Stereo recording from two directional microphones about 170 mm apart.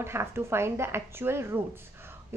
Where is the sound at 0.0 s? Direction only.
15° right (ahead or behind).